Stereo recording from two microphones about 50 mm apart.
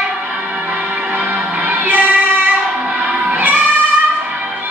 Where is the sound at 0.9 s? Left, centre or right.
Right.